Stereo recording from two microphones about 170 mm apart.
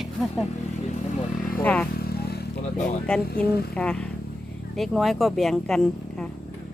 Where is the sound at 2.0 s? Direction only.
70° left (ahead or behind).